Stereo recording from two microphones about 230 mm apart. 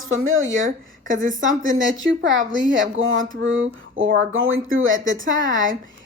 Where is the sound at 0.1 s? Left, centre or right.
Right.